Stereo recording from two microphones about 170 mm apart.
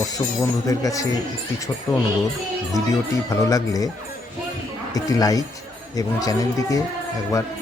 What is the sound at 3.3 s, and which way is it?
Speech, 20° left (ahead or behind).